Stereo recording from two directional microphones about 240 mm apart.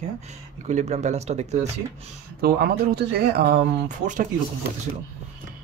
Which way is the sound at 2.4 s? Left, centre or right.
Right.